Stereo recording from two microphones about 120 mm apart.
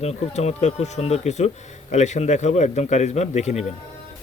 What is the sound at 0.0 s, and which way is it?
Speech, 70° left (ahead or behind).